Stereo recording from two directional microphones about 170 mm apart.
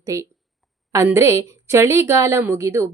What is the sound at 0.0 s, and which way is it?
Speech, 20° right (ahead or behind).